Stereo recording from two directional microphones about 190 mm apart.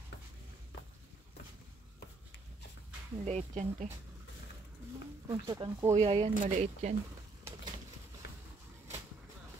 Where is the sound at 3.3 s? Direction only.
35° right (ahead or behind).